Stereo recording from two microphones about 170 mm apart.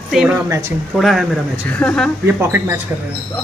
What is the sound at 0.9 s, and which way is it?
A woman's voice, centre (ahead or behind).